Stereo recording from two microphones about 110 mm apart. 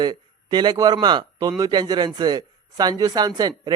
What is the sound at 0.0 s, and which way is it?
Speech, 40° right (ahead or behind).